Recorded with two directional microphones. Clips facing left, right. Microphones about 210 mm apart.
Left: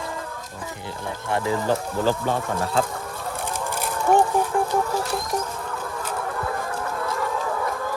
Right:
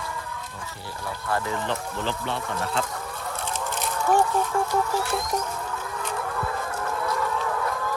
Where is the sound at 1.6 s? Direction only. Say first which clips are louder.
Left 7 dB; 40° left (ahead or behind).